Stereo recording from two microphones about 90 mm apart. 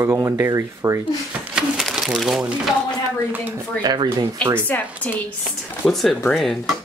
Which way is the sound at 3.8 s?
55° right (ahead or behind).